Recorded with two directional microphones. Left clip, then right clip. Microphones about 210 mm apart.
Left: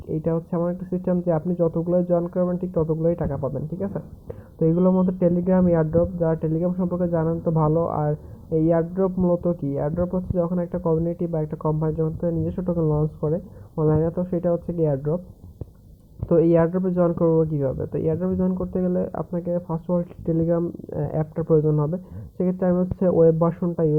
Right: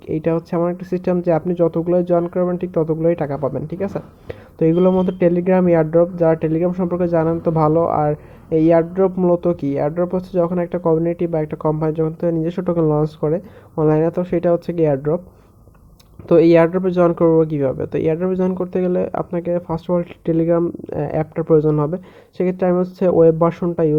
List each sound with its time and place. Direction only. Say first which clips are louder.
0.1 s speech: right 6 dB; 40° right (ahead or behind)
16.3 s speech: right 7 dB; 35° right (ahead or behind)